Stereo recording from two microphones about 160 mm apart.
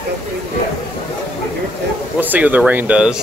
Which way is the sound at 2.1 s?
10° right (ahead or behind).